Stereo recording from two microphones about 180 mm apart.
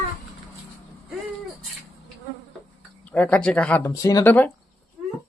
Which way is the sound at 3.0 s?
10° left (ahead or behind).